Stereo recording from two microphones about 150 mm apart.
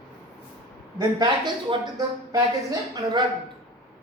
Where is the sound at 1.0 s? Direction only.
25° right (ahead or behind).